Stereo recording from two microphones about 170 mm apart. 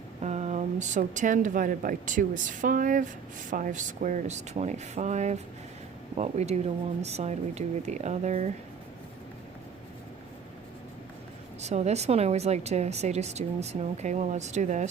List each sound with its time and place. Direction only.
0.2 s a woman's voice: 40° right (ahead or behind)
11.6 s a woman's voice: 40° right (ahead or behind)